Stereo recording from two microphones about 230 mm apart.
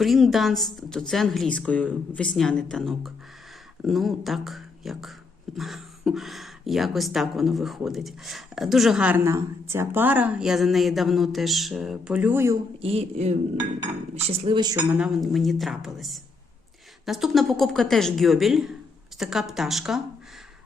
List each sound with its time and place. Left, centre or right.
0.0 s speech: centre
12.8 s speech: right; by 20.0 s centre